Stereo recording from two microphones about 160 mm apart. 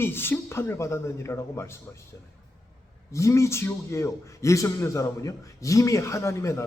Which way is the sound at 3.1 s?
20° left (ahead or behind).